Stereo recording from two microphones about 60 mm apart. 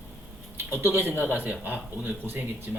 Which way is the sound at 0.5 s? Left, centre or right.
Right.